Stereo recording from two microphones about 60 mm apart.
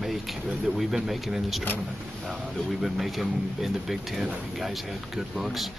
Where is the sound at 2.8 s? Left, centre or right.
Centre.